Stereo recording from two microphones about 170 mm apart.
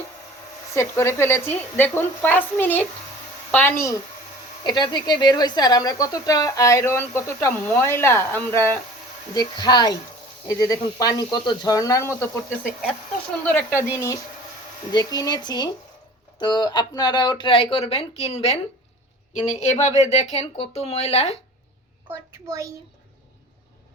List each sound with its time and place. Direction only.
0.7 s speech: 15° left (ahead or behind)
4.6 s speech: 25° left (ahead or behind)
9.3 s speech: 25° left (ahead or behind)
13.4 s speech: 10° left (ahead or behind)
14.9 s a woman's voice: 25° left (ahead or behind); by 21.3 s 40° left (ahead or behind)
22.1 s a child's voice: 15° right (ahead or behind)